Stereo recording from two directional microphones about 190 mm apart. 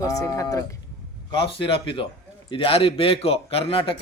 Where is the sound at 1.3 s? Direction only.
25° left (ahead or behind).